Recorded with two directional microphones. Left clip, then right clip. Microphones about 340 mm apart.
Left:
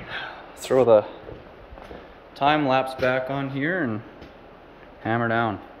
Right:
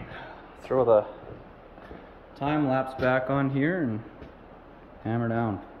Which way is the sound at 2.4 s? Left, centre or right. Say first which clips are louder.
Left 6 dB; centre.